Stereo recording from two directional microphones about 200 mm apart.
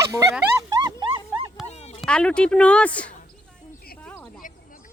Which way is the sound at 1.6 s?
35° left (ahead or behind).